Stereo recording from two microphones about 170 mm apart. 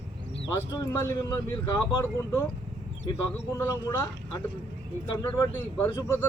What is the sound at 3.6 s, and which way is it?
Speech, 20° left (ahead or behind).